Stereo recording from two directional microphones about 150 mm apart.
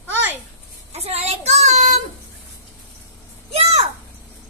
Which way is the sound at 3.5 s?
45° right (ahead or behind).